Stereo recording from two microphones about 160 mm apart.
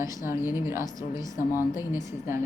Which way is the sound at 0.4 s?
15° right (ahead or behind).